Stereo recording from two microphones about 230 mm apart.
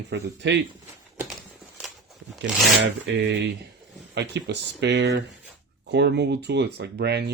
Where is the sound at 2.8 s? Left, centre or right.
Right.